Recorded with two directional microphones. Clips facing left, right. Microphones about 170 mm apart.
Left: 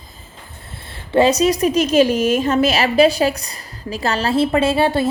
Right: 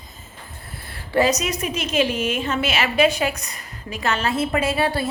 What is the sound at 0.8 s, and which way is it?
A woman's voice, 25° left (ahead or behind).